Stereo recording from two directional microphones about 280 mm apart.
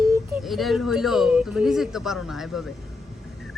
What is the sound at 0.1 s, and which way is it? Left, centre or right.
Speech, centre.